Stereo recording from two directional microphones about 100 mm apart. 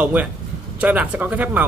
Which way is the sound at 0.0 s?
15° right (ahead or behind).